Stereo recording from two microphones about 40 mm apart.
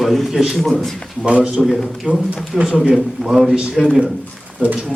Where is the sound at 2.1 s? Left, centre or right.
Right.